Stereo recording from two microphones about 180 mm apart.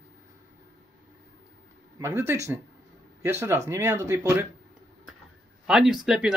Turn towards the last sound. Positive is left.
turn(degrees=-5)  # may be behind; listen again after turning